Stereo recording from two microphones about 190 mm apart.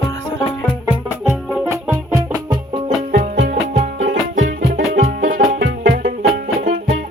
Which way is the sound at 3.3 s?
60° right (ahead or behind).